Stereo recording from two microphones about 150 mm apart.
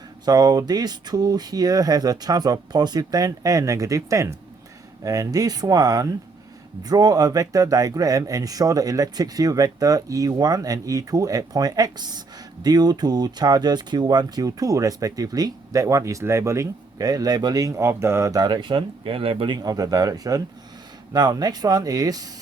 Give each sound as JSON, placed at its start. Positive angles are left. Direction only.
{"t": 0.3, "sound": "speech", "side_deg": -25}